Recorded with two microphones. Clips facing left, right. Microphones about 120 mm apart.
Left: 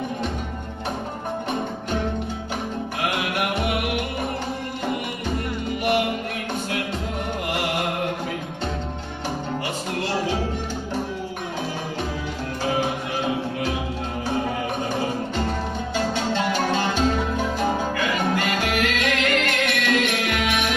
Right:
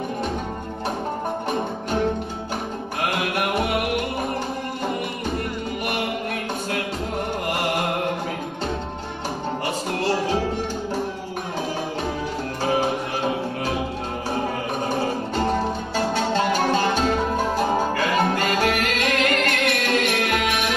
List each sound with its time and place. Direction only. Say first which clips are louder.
3.0 s mantra: right 1 dB; 45° right (ahead or behind)
15.4 s music: right 4 dB; 40° right (ahead or behind)
17.6 s music: right 2 dB; 40° right (ahead or behind)